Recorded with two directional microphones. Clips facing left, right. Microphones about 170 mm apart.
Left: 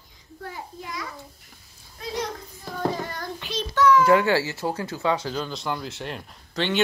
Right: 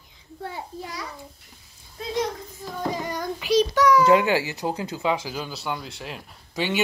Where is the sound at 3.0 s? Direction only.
15° right (ahead or behind).